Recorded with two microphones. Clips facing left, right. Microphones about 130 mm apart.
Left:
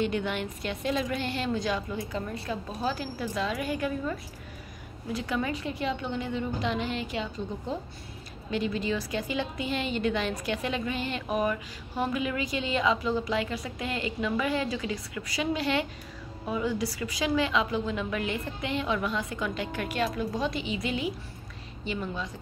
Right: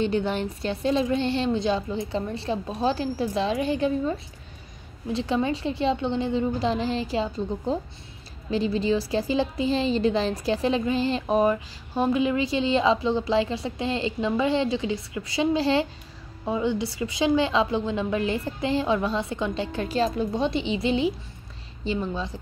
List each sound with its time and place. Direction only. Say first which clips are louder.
0.0 s a woman's voice: right 4 dB; 30° right (ahead or behind)